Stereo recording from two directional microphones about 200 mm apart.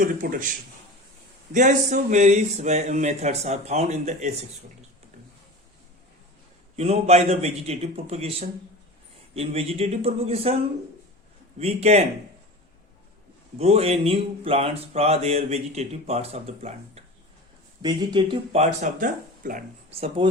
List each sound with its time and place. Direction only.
0.0 s a man's voice: 45° right (ahead or behind)
1.5 s speech: 40° right (ahead or behind)
6.7 s speech: 30° right (ahead or behind)
11.6 s speech: 30° right (ahead or behind)
13.6 s speech: 30° right (ahead or behind)
19.9 s speech: 30° right (ahead or behind)